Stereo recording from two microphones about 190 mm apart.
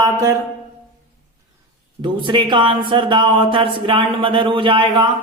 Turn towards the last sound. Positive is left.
turn(degrees=-25)  # may be behind; listen again after turning